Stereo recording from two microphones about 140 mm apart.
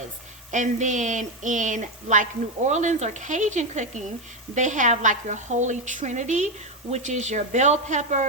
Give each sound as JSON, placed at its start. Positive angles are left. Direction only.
{"t": 0.5, "sound": "a woman's voice", "side_deg": -60}